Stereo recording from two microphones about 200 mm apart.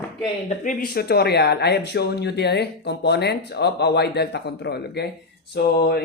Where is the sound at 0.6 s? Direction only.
45° left (ahead or behind).